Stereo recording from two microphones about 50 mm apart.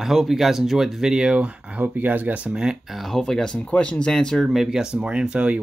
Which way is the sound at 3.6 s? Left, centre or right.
Left.